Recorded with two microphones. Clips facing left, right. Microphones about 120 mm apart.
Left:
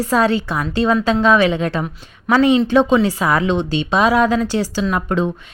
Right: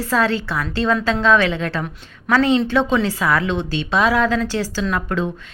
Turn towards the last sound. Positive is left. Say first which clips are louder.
# left 3 dB
turn(degrees=20)  # may be behind; listen again after turning